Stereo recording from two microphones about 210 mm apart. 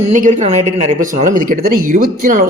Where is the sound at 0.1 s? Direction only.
35° right (ahead or behind).